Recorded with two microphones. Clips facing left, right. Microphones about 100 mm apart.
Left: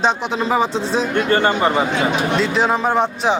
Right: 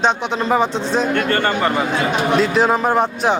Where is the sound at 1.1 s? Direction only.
15° left (ahead or behind).